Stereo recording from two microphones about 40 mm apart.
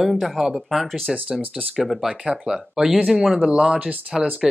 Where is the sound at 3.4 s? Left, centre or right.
Right.